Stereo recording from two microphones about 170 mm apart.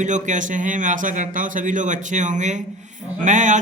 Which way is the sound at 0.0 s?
45° right (ahead or behind).